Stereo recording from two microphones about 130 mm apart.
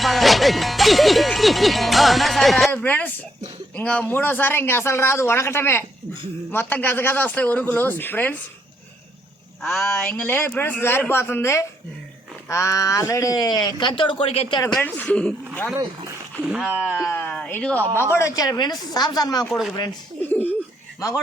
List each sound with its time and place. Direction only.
0.0 s speech: centre (ahead or behind)
2.7 s a man's voice: 10° left (ahead or behind)
9.6 s speech: centre (ahead or behind)
10.1 s a man's voice: 15° left (ahead or behind); by 14.6 s 45° left (ahead or behind)
14.8 s a man's voice: 10° left (ahead or behind)
16.4 s speech: 5° right (ahead or behind)
17.0 s a man's voice: 15° left (ahead or behind)
19.5 s speech: centre (ahead or behind)
20.2 s a man's voice: 15° left (ahead or behind)